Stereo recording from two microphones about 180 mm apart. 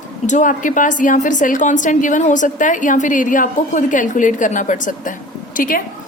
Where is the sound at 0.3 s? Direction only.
45° left (ahead or behind).